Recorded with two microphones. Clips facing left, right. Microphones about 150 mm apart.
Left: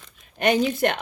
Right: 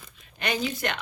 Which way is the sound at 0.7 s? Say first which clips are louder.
Left 8 dB; 50° left (ahead or behind).